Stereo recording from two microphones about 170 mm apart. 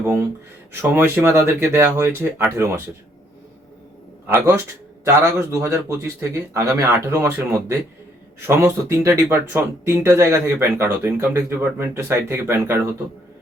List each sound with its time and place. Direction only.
0.8 s speech: 10° right (ahead or behind)
4.3 s speech: 15° right (ahead or behind)